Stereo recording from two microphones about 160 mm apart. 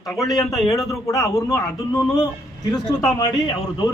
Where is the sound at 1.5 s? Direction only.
20° left (ahead or behind).